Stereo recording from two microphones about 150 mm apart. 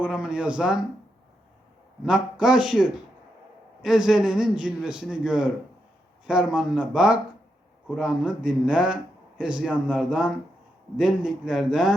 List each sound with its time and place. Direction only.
0.0 s speech: 5° right (ahead or behind)
2.0 s a man's voice: 5° right (ahead or behind)